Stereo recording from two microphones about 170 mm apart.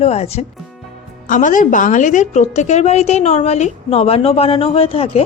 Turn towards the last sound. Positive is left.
turn(degrees=35)  # may be behind; listen again after turning